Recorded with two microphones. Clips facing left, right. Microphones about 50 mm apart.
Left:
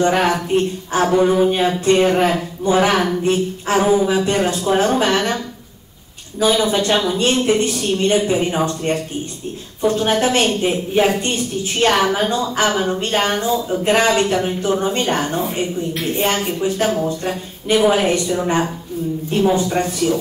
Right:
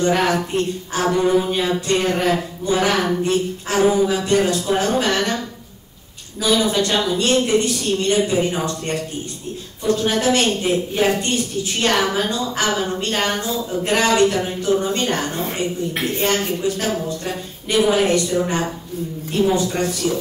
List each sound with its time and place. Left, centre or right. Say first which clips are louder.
0.0 s speech: left 2 dB; left
1.1 s a woman's voice: left 3 dB; centre
1.5 s speech: left 4 dB; left
3.8 s a woman's voice: right 1 dB; centre
4.1 s speech: left 1 dB; left
6.4 s a woman's voice: left 2 dB; left